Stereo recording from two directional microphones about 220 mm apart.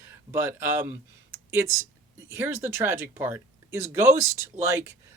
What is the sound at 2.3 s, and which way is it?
Speech, 10° right (ahead or behind).